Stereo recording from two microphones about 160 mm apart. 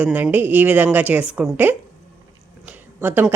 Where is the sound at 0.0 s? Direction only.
10° right (ahead or behind).